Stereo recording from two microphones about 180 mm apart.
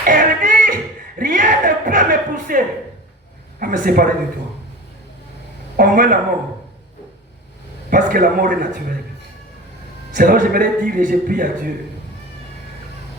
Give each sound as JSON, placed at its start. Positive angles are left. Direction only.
{"t": 0.0, "sound": "music", "side_deg": -50}
{"t": 1.2, "sound": "speech", "side_deg": -45}
{"t": 5.7, "sound": "speech", "side_deg": -50}
{"t": 7.9, "sound": "speech", "side_deg": -50}
{"t": 10.2, "sound": "speech", "side_deg": -50}